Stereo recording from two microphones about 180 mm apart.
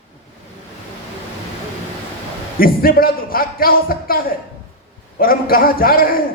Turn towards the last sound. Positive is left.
turn(degrees=55)  # may be behind; listen again after turning